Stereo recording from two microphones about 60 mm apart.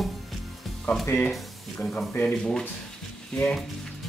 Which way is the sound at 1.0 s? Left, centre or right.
Left.